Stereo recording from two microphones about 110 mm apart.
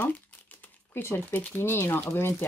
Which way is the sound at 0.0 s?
15° left (ahead or behind).